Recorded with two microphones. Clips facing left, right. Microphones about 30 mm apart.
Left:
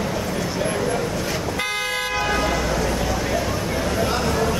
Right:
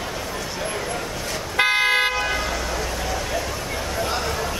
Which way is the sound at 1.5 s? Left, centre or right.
Right.